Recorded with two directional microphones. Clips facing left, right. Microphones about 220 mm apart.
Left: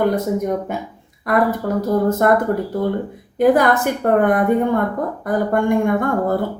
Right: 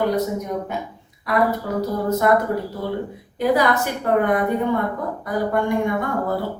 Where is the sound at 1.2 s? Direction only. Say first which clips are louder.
Left 3 dB; 50° left (ahead or behind).